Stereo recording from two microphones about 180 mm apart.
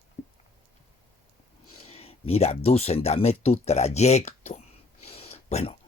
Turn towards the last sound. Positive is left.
turn(degrees=35)  # may be behind; listen again after turning